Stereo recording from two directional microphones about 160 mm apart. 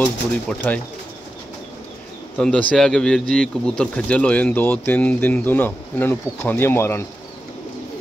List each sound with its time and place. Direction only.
0.0 s speech: 10° left (ahead or behind)
2.3 s speech: 5° left (ahead or behind)